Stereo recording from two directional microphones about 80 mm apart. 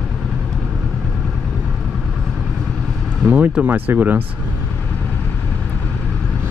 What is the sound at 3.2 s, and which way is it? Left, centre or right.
Speech, centre.